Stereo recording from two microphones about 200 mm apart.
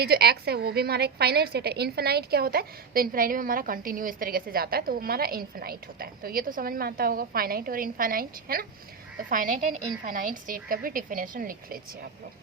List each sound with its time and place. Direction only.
0.0 s a woman's voice: 55° right (ahead or behind)